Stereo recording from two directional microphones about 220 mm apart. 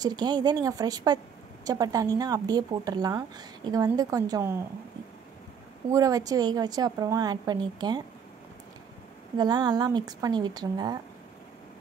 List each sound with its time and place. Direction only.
0.0 s a woman's voice: 20° right (ahead or behind)
5.9 s a woman's voice: 15° right (ahead or behind)
9.4 s a woman's voice: 20° right (ahead or behind)